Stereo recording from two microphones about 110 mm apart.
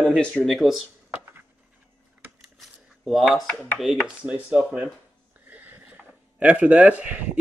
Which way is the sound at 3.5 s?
15° left (ahead or behind).